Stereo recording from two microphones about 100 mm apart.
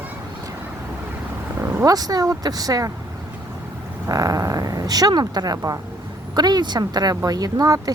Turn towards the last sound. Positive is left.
turn(degrees=-35)  # may be behind; listen again after turning